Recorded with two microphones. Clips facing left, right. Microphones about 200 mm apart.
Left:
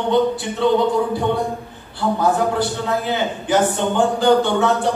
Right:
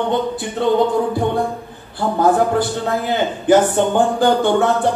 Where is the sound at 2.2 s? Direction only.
50° right (ahead or behind).